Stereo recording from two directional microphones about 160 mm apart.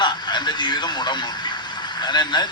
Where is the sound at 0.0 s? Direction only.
30° left (ahead or behind).